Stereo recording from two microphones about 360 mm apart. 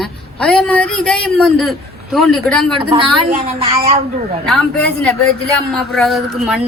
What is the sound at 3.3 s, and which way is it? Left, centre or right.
Speech, centre.